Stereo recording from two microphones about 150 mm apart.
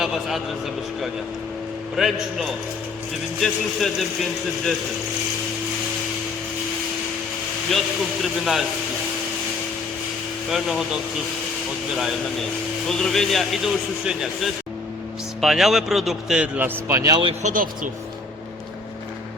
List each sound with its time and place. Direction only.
0.0 s a man's voice: centre (ahead or behind)
2.0 s a man's voice: centre (ahead or behind)
8.2 s a man's voice: centre (ahead or behind)
10.5 s a man's voice: centre (ahead or behind)
12.9 s a man's voice: 5° left (ahead or behind); by 17.2 s 25° right (ahead or behind)
17.4 s speech: 65° right (ahead or behind)